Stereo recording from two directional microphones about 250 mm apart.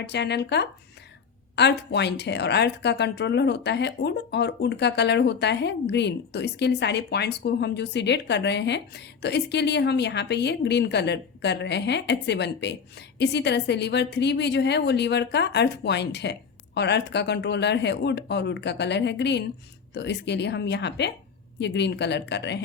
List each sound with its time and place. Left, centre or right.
0.0 s speech: left